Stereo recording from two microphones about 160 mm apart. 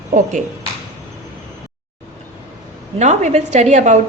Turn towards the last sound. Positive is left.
turn(degrees=-45)  # may be behind; listen again after turning